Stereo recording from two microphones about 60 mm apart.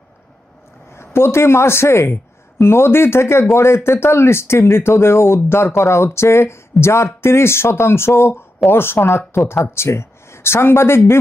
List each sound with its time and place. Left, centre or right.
0.9 s speech: left